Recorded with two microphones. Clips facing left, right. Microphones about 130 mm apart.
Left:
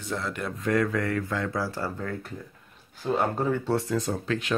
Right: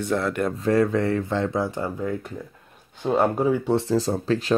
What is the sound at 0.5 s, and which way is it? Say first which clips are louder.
Speech: right 3 dB; 30° right (ahead or behind).